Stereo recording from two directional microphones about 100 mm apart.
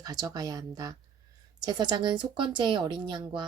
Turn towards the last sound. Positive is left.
turn(degrees=-50)  # may be behind; listen again after turning